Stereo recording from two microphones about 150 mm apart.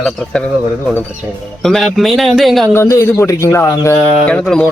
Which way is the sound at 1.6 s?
Centre (ahead or behind).